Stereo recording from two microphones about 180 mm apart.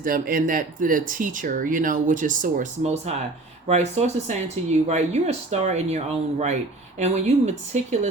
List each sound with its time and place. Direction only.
0.0 s speech: 50° right (ahead or behind)
7.0 s speech: 40° right (ahead or behind)